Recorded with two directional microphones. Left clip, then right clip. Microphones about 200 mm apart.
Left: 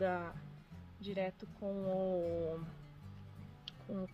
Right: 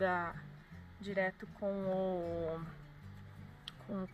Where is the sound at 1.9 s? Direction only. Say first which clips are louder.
Left 3 dB; centre (ahead or behind).